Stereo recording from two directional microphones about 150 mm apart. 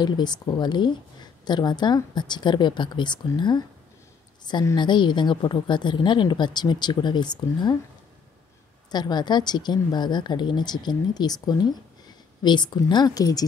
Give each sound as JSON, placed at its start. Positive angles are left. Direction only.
{"t": 0.0, "sound": "a woman's voice", "side_deg": 30}
{"t": 8.9, "sound": "a woman's voice", "side_deg": 30}